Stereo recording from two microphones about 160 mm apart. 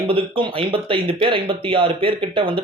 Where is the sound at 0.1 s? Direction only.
35° right (ahead or behind).